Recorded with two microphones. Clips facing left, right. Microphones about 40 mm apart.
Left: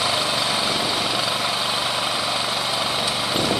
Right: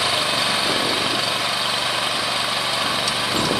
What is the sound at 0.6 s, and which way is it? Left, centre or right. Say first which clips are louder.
Vehicle: right 2 dB; centre.